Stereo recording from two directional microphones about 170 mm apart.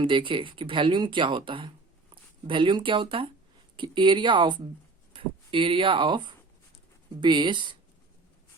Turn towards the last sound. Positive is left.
turn(degrees=-30)  # may be behind; listen again after turning